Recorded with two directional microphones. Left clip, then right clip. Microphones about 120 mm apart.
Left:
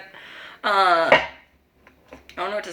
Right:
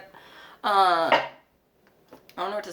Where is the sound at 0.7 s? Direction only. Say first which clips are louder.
Left 2 dB; 25° left (ahead or behind).